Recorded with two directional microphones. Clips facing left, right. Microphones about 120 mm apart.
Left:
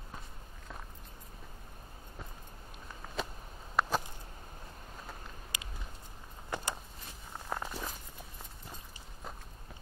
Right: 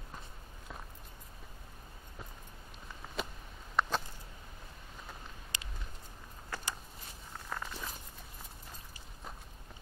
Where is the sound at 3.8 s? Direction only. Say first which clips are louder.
Left 1 dB; 5° left (ahead or behind).